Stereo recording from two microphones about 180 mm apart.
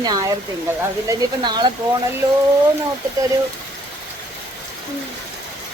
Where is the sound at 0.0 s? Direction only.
20° right (ahead or behind).